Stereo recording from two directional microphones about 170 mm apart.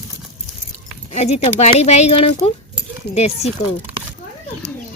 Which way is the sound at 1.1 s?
40° left (ahead or behind).